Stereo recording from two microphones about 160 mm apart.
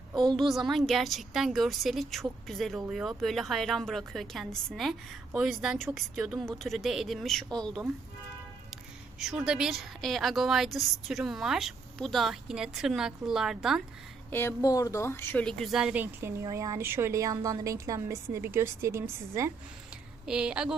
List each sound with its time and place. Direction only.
0.1 s a sound: 30° right (ahead or behind)
0.3 s a woman's voice: centre (ahead or behind)
9.1 s a woman's voice: 5° right (ahead or behind)
14.3 s a woman's voice: 15° left (ahead or behind); by 19.1 s 15° right (ahead or behind)
20.2 s a woman's voice: 5° right (ahead or behind)